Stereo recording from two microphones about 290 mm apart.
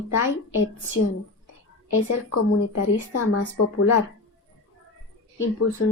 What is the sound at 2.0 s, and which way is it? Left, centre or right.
A woman's voice, left.